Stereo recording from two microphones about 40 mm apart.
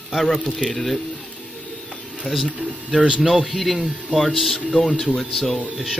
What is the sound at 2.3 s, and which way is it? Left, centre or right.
Speech, right.